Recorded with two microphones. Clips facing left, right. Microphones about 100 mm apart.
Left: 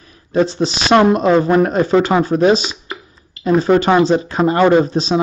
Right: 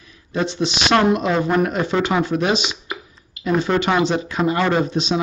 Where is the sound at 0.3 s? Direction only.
35° left (ahead or behind).